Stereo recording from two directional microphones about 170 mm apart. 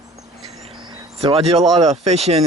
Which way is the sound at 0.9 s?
30° right (ahead or behind).